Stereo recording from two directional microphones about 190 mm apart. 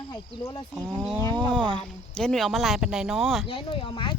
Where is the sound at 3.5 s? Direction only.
25° left (ahead or behind).